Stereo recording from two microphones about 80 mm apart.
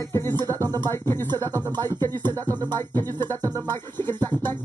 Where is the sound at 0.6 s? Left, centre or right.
Right.